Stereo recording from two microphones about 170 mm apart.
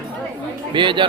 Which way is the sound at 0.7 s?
30° right (ahead or behind).